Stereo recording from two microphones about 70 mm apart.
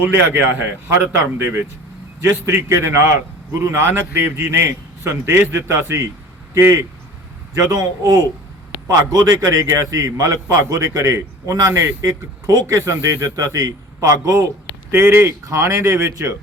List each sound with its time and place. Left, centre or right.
0.2 s a man's voice: right
7.7 s a man's voice: right
14.8 s a man's voice: right